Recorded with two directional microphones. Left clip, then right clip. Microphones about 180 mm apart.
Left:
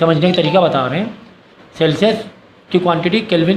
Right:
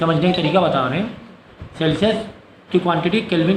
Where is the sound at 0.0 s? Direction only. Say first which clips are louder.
Left 5 dB; 40° left (ahead or behind).